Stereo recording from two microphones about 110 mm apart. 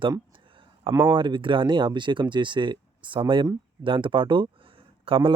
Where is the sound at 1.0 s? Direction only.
45° right (ahead or behind).